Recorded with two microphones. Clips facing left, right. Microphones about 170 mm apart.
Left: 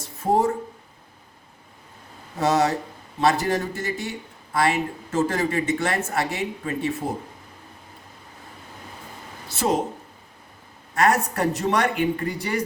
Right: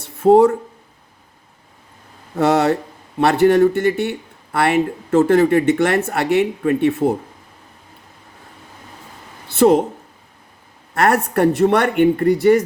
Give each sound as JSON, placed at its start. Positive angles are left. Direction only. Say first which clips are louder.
{"t": 0.0, "sound": "a sound", "louder": "right 10 dB", "side_deg": -65}
{"t": 2.4, "sound": "speech", "louder": "right 5 dB", "side_deg": -60}
{"t": 9.5, "sound": "speech", "louder": "right 11 dB", "side_deg": -60}
{"t": 10.9, "sound": "speech", "louder": "right 5 dB", "side_deg": -60}